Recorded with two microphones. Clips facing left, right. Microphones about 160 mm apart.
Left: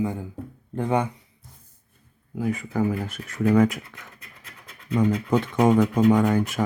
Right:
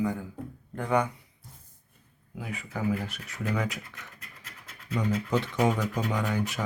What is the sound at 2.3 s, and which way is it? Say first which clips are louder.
Speech: left 11 dB; 45° left (ahead or behind).